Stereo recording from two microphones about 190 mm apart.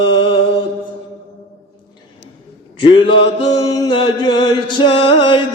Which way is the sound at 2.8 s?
25° left (ahead or behind).